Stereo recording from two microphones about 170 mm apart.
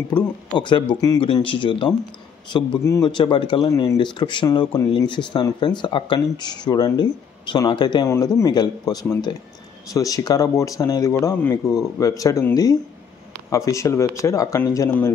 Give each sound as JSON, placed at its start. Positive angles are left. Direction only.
{"t": 0.1, "sound": "speech", "side_deg": 25}